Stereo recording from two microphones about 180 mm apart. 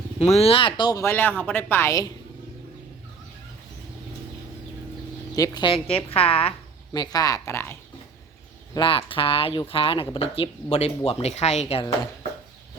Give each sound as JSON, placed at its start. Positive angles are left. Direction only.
{"t": 0.2, "sound": "speech", "side_deg": 35}
{"t": 5.3, "sound": "speech", "side_deg": 20}
{"t": 8.7, "sound": "speech", "side_deg": 30}